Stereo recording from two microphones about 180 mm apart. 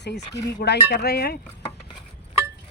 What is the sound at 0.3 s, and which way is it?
Speech, 70° left (ahead or behind).